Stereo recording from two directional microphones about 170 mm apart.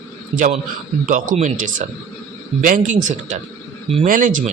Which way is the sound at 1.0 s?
50° right (ahead or behind).